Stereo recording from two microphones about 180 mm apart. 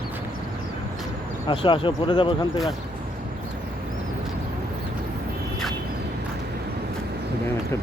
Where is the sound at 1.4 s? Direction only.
30° left (ahead or behind).